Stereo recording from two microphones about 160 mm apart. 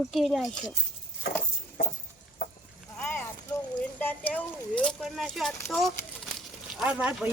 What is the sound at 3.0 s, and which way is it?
Clip-clop, 15° left (ahead or behind).